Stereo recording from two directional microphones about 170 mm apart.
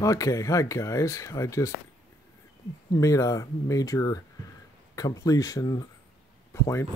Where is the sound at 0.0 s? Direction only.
20° left (ahead or behind).